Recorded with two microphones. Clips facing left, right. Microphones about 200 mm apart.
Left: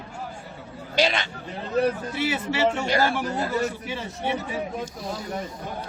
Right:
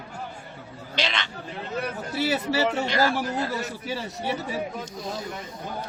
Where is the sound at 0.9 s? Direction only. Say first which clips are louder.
Left 6 dB; 45° left (ahead or behind).